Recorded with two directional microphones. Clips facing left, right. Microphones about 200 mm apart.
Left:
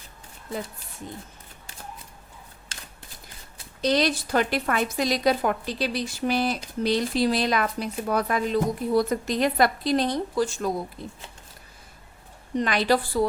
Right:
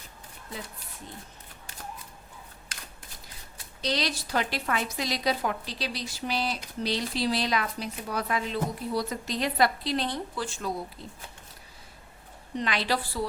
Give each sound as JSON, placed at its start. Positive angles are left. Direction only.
{"t": 3.8, "sound": "speech", "side_deg": 50}
{"t": 12.5, "sound": "speech", "side_deg": 45}